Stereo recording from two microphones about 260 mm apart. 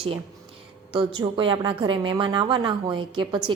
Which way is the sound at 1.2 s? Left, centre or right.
Centre.